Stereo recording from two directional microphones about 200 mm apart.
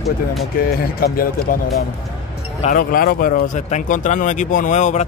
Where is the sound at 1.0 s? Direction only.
45° left (ahead or behind).